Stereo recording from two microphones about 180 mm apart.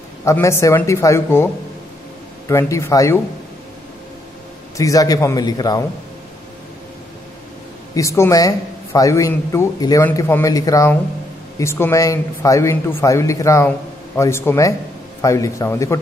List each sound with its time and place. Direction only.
0.2 s speech: 15° left (ahead or behind)
4.7 s a man's voice: 20° left (ahead or behind)
7.9 s speech: 15° left (ahead or behind)